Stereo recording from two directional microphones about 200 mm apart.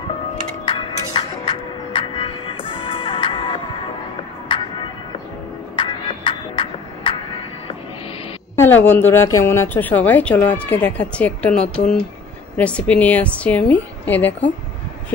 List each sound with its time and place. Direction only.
0.7 s music: 25° left (ahead or behind)
8.5 s a woman's voice: 10° left (ahead or behind)